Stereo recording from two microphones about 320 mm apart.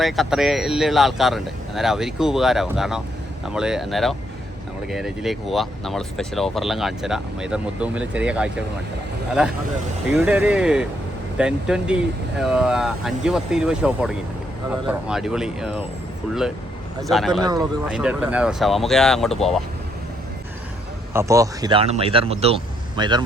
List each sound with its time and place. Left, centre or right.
0.0 s speech: centre
17.0 s speech: centre
21.1 s speech: centre